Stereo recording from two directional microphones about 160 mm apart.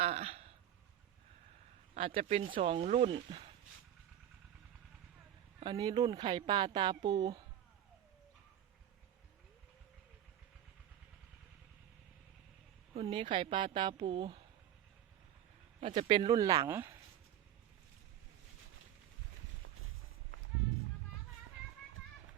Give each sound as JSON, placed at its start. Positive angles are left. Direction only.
{"t": 0.0, "sound": "a sound", "side_deg": -40}
{"t": 2.0, "sound": "a woman's voice", "side_deg": -35}
{"t": 5.5, "sound": "speech", "side_deg": -25}
{"t": 12.9, "sound": "a woman's voice", "side_deg": -35}
{"t": 16.0, "sound": "speech", "side_deg": -30}